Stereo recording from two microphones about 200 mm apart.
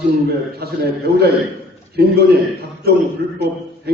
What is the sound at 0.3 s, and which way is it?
A man's voice, 50° right (ahead or behind).